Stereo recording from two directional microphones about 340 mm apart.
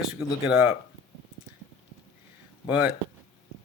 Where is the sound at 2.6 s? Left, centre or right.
Centre.